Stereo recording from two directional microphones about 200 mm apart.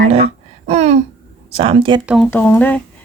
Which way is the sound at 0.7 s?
35° right (ahead or behind).